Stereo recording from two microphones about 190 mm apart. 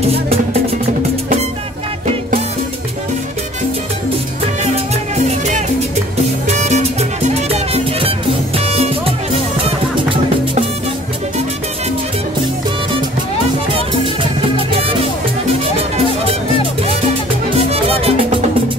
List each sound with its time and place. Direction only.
6.4 s music: 35° right (ahead or behind)
17.6 s music: 30° right (ahead or behind)